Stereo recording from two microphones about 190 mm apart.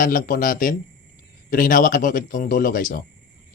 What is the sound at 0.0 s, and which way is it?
Speech, 45° left (ahead or behind).